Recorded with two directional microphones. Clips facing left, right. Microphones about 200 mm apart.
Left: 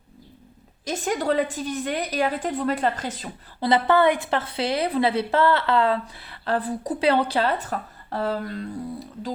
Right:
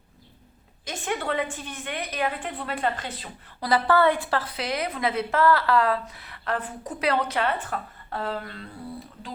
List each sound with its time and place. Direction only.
0.9 s a woman's voice: 40° left (ahead or behind)
3.6 s a woman's voice: 20° left (ahead or behind); by 8.6 s 40° left (ahead or behind)